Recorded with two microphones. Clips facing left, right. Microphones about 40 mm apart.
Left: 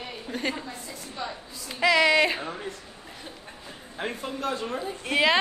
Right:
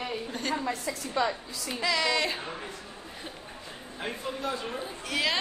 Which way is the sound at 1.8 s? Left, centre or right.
Left.